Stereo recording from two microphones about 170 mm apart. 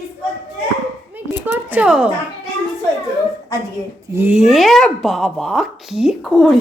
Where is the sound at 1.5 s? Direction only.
10° right (ahead or behind).